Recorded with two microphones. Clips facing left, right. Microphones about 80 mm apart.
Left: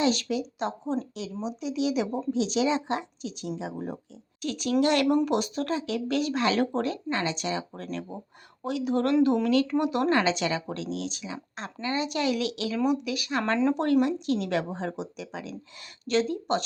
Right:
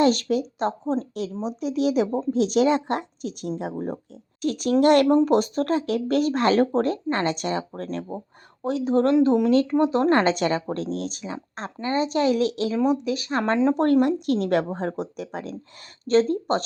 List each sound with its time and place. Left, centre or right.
0.0 s a woman's voice: right
10.1 s a woman's voice: right
13.7 s a woman's voice: right